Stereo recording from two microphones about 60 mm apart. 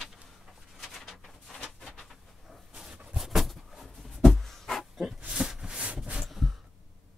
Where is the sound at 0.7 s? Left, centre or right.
Centre.